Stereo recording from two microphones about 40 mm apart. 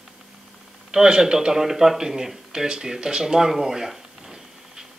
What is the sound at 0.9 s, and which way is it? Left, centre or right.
Speech, centre.